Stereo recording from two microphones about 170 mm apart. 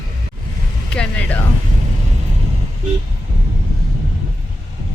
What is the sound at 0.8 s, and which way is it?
Speech, 5° left (ahead or behind).